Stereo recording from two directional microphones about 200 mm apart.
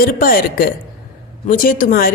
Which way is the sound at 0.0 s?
45° left (ahead or behind).